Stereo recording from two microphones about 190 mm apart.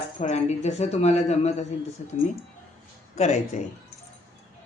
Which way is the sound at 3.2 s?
35° left (ahead or behind).